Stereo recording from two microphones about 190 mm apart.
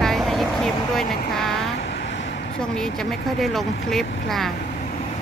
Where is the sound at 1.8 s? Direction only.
70° left (ahead or behind).